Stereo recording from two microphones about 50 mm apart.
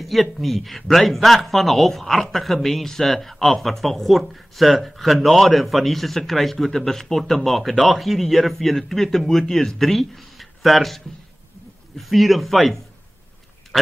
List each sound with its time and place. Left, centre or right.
0.0 s a man's voice: centre
12.0 s a man's voice: centre